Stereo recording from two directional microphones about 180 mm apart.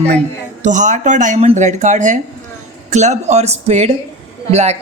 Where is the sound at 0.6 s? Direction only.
45° right (ahead or behind).